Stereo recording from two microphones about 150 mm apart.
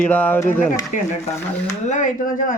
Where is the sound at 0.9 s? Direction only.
60° left (ahead or behind).